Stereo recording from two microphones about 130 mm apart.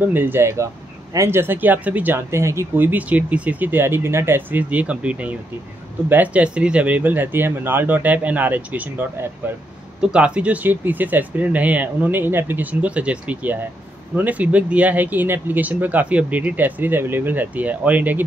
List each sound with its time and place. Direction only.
0.1 s speech: 15° right (ahead or behind)